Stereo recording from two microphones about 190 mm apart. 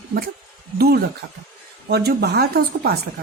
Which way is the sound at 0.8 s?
55° right (ahead or behind).